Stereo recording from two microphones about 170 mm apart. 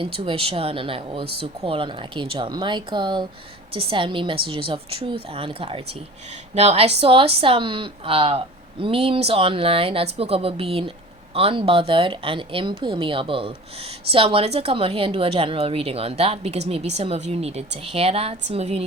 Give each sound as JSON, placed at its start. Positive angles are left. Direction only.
{"t": 0.0, "sound": "a woman's voice", "side_deg": -30}